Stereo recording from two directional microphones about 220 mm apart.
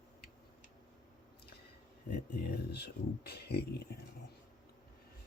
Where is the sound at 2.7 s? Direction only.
45° left (ahead or behind).